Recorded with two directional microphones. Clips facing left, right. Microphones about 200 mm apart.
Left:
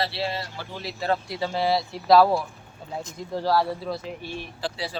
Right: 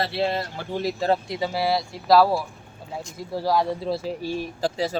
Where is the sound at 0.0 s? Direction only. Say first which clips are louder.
Right 4 dB; 50° right (ahead or behind).